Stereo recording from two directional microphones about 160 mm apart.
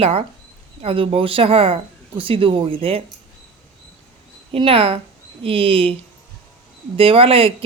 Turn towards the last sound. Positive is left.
turn(degrees=-35)  # may be behind; listen again after turning